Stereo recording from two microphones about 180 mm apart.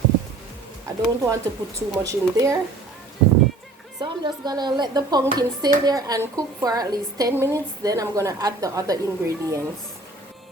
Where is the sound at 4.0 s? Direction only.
20° right (ahead or behind).